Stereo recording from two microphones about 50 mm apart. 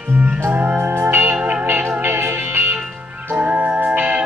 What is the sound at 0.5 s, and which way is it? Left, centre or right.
Music, right.